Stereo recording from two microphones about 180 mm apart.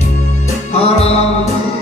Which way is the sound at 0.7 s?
35° left (ahead or behind).